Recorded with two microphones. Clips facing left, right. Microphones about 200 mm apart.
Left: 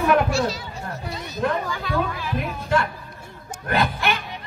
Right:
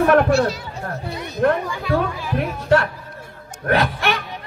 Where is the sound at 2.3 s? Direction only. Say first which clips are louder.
Right 6 dB; 65° right (ahead or behind).